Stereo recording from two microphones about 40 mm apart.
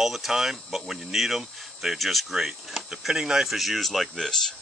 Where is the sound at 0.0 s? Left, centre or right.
Centre.